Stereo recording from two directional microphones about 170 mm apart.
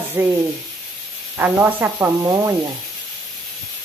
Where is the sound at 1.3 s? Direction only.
10° right (ahead or behind).